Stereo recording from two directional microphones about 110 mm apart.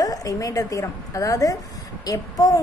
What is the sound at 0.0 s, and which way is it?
A woman's voice, 30° left (ahead or behind).